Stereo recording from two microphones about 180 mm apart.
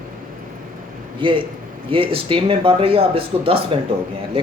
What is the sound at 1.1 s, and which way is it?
A man's voice, 25° right (ahead or behind).